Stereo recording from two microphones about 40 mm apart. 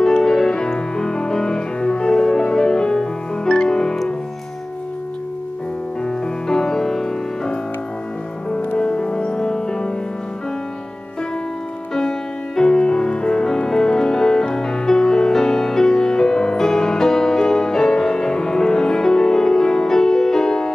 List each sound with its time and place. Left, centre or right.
0.0 s music: centre
6.0 s music: centre
8.7 s music: left
11.9 s music: centre